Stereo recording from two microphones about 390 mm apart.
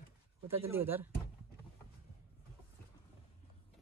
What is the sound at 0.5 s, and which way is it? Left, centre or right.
Speech, centre.